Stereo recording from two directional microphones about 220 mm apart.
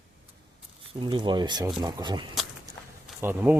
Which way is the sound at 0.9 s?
20° right (ahead or behind).